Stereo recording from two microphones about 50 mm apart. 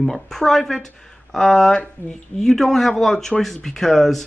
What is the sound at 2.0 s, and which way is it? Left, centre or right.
Speech, left.